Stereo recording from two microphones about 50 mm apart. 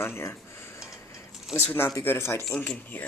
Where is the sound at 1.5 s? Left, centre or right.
Centre.